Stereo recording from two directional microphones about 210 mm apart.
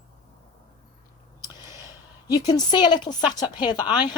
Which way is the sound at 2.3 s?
20° left (ahead or behind).